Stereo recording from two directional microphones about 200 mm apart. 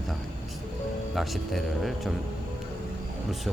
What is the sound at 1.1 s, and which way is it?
Speech, centre (ahead or behind).